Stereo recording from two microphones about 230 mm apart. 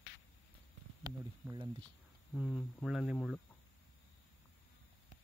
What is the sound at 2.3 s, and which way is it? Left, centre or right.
Speech, centre.